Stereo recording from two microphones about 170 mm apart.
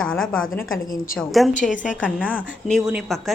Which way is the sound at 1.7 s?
50° left (ahead or behind).